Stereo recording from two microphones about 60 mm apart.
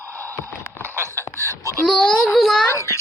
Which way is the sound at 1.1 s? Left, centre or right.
Left.